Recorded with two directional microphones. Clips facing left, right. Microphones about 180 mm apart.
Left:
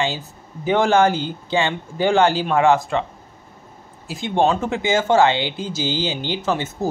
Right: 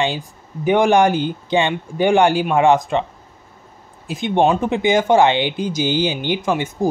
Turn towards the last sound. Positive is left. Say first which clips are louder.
# right 3 dB
turn(degrees=-15)  # may be behind; listen again after turning